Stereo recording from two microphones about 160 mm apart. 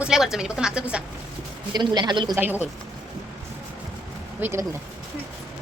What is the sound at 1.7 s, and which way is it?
Speech, 25° right (ahead or behind).